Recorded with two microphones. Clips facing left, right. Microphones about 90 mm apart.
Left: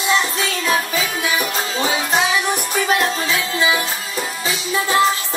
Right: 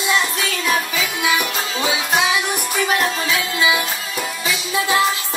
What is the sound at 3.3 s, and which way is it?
Music, 30° left (ahead or behind).